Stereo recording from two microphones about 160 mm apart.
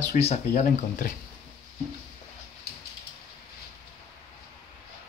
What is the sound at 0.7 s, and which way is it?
Speech, 65° left (ahead or behind).